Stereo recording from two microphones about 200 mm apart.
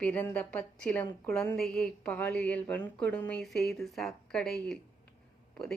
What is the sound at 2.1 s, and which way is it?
A woman's voice, 15° left (ahead or behind).